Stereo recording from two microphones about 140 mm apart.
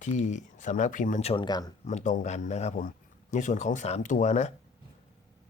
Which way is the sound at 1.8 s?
55° left (ahead or behind).